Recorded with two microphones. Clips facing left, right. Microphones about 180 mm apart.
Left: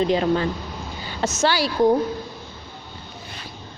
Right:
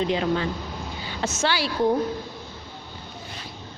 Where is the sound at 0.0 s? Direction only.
40° left (ahead or behind).